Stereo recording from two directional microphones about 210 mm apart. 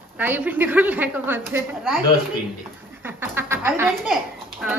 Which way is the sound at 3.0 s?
10° right (ahead or behind).